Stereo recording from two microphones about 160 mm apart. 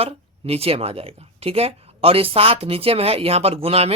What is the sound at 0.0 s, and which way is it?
Speech, 40° right (ahead or behind).